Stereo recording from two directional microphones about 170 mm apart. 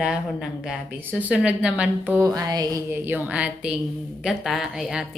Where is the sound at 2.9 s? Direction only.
10° right (ahead or behind).